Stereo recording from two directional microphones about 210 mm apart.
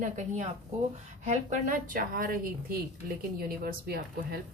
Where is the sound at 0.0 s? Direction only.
35° right (ahead or behind).